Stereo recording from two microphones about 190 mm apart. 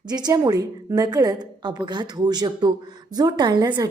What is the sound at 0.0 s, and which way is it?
A woman's voice, 20° right (ahead or behind).